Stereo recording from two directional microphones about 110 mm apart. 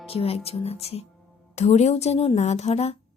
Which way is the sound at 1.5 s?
90° left.